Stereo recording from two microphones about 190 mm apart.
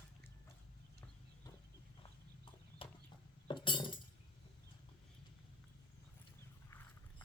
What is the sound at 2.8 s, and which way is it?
Chicken, 30° left (ahead or behind).